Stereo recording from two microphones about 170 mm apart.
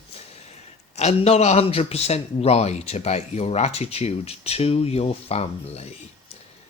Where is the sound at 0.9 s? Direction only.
40° left (ahead or behind).